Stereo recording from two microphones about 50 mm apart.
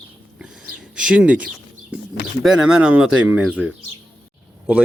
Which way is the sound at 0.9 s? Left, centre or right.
Centre.